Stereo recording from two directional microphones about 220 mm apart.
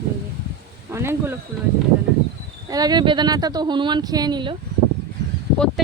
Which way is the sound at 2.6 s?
15° right (ahead or behind).